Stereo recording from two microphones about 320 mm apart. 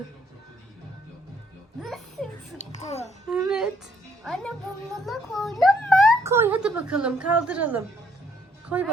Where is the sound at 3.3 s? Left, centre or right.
Centre.